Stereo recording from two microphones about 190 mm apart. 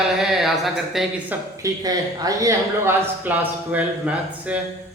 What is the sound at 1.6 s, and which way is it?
Speech, 20° right (ahead or behind).